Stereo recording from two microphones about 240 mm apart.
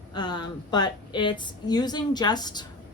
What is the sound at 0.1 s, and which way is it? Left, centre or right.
A woman's voice, centre.